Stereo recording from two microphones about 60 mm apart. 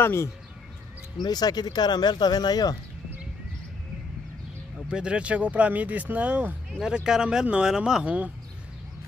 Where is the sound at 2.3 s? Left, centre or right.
Left.